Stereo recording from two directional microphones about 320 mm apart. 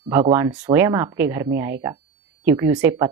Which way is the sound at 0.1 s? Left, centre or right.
Centre.